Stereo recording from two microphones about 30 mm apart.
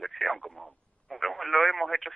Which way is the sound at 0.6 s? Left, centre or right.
Centre.